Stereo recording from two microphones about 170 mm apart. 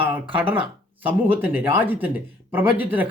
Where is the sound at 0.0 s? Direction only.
30° right (ahead or behind).